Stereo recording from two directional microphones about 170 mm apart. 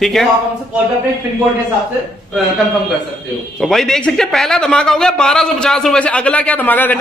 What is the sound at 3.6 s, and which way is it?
Speech, centre (ahead or behind).